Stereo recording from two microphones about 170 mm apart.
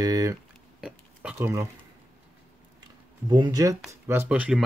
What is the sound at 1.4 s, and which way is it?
Speech, 15° right (ahead or behind).